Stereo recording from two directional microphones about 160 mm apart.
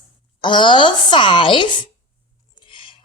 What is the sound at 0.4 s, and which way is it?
A woman's voice, 30° left (ahead or behind).